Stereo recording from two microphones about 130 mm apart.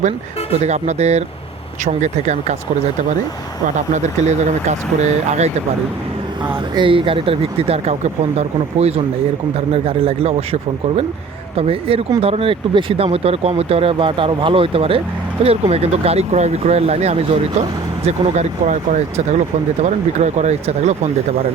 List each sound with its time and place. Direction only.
0.6 s speech: 60° right (ahead or behind)
3.8 s speech: 65° right (ahead or behind)
6.7 s speech: 40° right (ahead or behind); by 21.1 s 60° right (ahead or behind)